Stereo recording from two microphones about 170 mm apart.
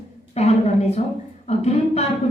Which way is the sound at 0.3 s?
40° left (ahead or behind).